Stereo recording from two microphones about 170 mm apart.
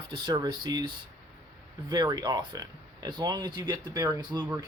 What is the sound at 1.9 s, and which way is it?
Speech, 20° right (ahead or behind).